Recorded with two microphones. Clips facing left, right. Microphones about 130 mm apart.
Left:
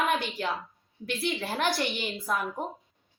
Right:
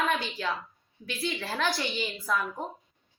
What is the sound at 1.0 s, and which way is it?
Speech, 60° left (ahead or behind).